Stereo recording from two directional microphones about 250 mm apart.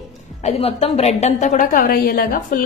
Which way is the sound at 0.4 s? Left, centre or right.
Left.